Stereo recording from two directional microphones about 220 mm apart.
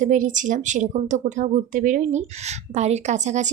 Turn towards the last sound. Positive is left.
turn(degrees=-30)  # may be behind; listen again after turning